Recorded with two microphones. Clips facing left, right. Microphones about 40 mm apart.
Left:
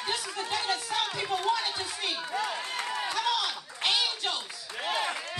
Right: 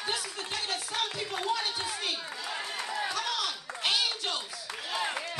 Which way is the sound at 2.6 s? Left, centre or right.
Left.